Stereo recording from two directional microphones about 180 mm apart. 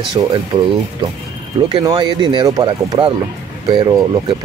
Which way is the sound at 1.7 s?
25° right (ahead or behind).